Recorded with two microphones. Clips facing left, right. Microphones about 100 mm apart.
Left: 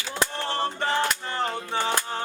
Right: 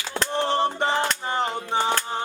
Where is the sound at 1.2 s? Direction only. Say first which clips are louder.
Right 3 dB; 20° right (ahead or behind).